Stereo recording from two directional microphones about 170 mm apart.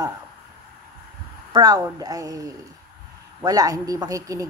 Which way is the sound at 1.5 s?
25° right (ahead or behind).